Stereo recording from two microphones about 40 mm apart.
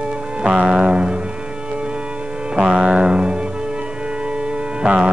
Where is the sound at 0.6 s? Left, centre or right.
Right.